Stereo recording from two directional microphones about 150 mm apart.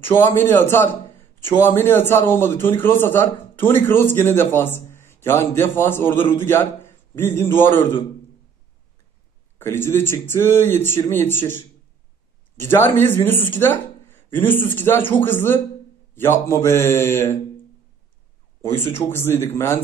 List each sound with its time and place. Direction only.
0.0 s a man's voice: 15° left (ahead or behind)
9.6 s a man's voice: 15° left (ahead or behind)
18.6 s a man's voice: 15° left (ahead or behind)